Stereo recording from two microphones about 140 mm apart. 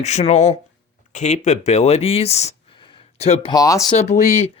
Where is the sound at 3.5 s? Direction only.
25° left (ahead or behind).